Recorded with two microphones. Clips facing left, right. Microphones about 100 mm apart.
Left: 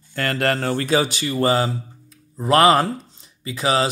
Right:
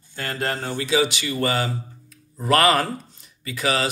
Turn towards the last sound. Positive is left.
turn(degrees=30)  # may be behind; listen again after turning